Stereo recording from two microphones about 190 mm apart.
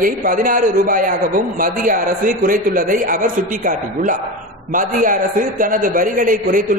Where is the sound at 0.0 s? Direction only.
45° right (ahead or behind).